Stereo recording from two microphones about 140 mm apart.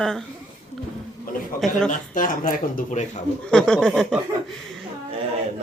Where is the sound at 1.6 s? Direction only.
Centre (ahead or behind).